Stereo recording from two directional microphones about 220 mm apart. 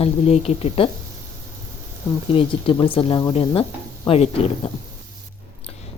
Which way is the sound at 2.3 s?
25° left (ahead or behind).